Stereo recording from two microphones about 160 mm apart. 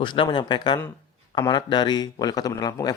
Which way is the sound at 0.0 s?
30° left (ahead or behind).